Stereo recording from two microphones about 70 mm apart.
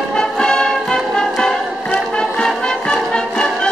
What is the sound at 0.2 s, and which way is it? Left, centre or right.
Music, centre.